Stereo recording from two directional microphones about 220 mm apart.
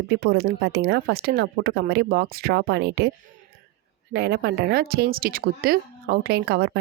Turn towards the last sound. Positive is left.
turn(degrees=-45)  # may be behind; listen again after turning